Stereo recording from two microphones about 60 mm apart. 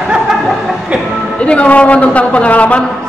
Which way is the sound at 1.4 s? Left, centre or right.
Left.